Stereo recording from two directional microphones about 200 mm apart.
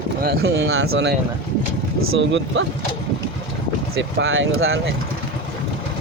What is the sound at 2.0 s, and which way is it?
Speech, 80° right.